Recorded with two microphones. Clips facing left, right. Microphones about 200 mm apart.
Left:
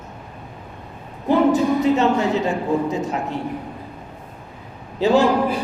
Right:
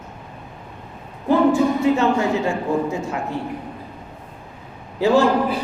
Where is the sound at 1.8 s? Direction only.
20° left (ahead or behind).